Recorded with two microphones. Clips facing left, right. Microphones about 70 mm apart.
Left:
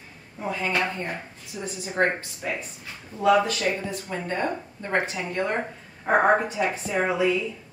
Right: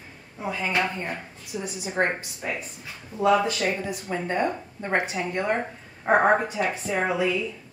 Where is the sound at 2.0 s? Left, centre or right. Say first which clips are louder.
Left 1 dB; centre.